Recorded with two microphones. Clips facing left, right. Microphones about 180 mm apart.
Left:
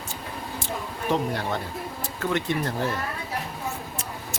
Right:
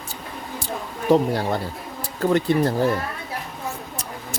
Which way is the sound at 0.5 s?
35° right (ahead or behind).